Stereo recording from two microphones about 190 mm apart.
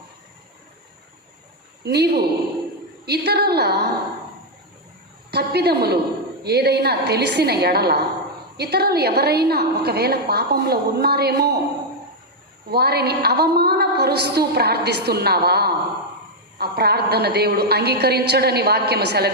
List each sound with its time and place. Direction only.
1.8 s a woman's voice: 60° right (ahead or behind)
5.3 s a woman's voice: 60° right (ahead or behind)
12.7 s a woman's voice: 55° right (ahead or behind)